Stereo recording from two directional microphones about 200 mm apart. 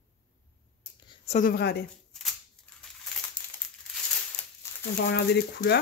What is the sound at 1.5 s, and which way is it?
Speech, 55° left (ahead or behind).